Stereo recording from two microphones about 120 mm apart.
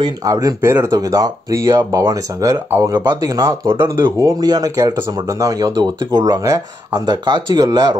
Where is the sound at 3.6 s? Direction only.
45° right (ahead or behind).